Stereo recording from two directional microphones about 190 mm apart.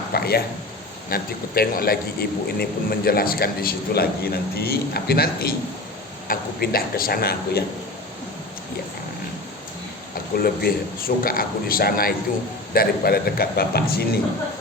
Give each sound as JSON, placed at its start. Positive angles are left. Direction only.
{"t": 0.1, "sound": "a man's voice", "side_deg": 55}
{"t": 10.3, "sound": "a man's voice", "side_deg": 55}